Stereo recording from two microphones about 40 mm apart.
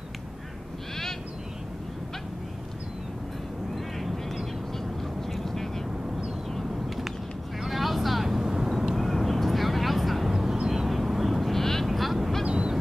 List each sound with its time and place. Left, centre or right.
4.7 s vehicle: centre
6.7 s a sound: centre
7.6 s vehicle: centre
8.9 s vehicle: centre
11.5 s vehicle: centre
11.9 s vehicle: centre
12.4 s honk: right